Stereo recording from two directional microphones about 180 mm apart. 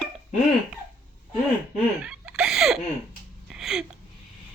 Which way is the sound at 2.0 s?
5° right (ahead or behind).